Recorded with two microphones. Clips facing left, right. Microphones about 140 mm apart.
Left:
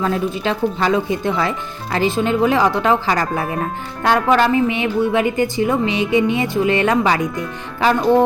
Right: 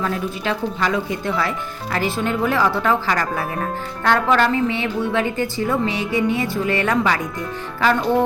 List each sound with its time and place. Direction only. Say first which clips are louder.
0.0 s speech: left 4 dB; 25° left (ahead or behind)